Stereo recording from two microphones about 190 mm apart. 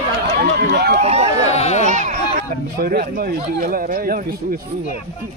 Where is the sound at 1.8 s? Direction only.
40° right (ahead or behind).